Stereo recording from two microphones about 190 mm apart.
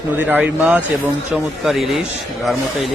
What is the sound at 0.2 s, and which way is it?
A man's voice, 10° right (ahead or behind).